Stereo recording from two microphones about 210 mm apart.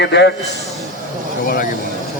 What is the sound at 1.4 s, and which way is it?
Speech, 40° left (ahead or behind).